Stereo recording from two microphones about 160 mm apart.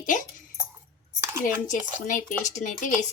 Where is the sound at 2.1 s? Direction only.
55° left (ahead or behind).